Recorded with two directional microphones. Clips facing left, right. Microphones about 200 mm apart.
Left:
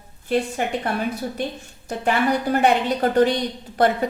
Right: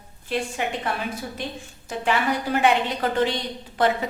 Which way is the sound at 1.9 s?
40° left (ahead or behind).